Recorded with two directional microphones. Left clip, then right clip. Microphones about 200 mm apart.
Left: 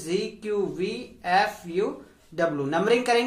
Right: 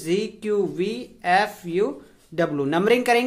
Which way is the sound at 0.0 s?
45° right (ahead or behind).